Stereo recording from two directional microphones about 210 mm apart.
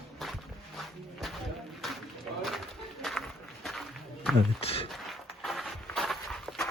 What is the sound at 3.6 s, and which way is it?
Walk, centre (ahead or behind).